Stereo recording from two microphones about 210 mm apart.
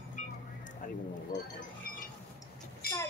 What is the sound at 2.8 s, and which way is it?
Music, 45° left (ahead or behind).